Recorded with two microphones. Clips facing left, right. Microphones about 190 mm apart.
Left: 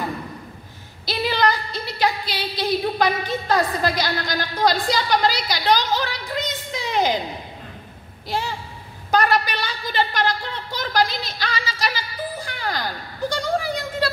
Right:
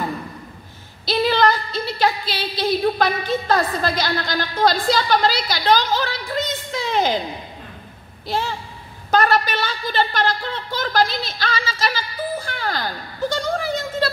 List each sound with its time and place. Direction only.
1.4 s a woman's voice: 15° left (ahead or behind)
8.3 s a woman's voice: 10° left (ahead or behind)